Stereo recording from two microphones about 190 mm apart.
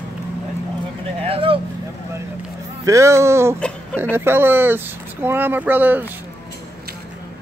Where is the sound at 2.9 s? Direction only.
15° right (ahead or behind).